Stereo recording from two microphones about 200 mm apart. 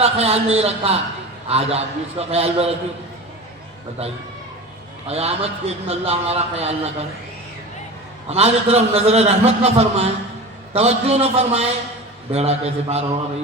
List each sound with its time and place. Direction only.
0.0 s a man's voice: 30° right (ahead or behind)
5.0 s a man's voice: 30° right (ahead or behind)
8.3 s a man's voice: 30° right (ahead or behind)